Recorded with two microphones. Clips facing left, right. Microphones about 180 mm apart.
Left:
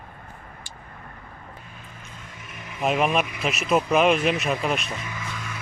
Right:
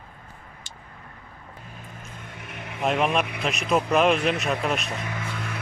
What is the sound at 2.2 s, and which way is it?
Vehicle, 60° right (ahead or behind).